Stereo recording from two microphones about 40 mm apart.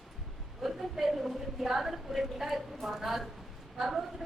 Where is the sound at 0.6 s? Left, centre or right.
Centre.